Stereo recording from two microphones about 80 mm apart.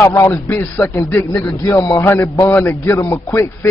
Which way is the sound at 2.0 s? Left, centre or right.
Left.